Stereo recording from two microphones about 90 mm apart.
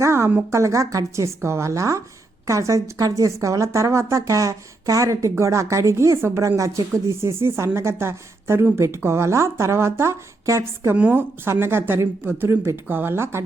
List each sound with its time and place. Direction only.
0.0 s a woman's voice: 30° right (ahead or behind)
10.9 s speech: 20° right (ahead or behind)